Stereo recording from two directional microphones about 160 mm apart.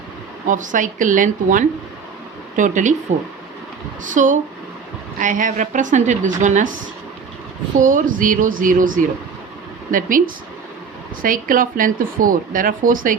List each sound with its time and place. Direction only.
0.4 s a woman's voice: 55° right (ahead or behind)
4.0 s a woman's voice: 50° right (ahead or behind)
7.8 s speech: 55° right (ahead or behind)